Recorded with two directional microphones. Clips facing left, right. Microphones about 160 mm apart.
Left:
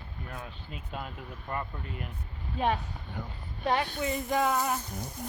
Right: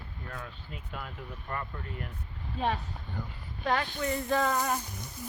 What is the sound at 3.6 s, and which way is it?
Speech, 20° left (ahead or behind).